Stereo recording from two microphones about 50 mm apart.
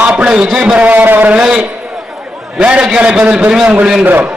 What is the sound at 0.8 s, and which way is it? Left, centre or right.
Speech, right.